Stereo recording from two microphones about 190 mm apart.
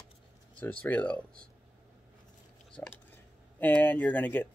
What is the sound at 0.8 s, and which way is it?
Speech, 10° left (ahead or behind).